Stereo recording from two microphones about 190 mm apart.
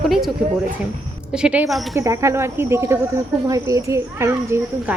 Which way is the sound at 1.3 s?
5° right (ahead or behind).